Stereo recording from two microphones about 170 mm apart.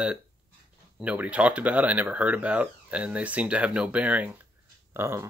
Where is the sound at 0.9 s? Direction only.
10° right (ahead or behind).